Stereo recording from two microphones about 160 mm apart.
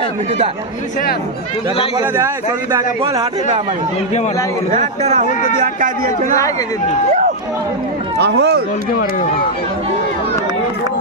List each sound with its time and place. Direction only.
3.0 s a man's voice: 35° right (ahead or behind)
4.7 s a man's voice: 45° right (ahead or behind)
8.2 s speech: 90° right